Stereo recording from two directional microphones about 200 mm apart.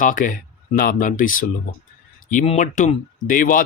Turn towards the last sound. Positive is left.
turn(degrees=45)  # may be behind; listen again after turning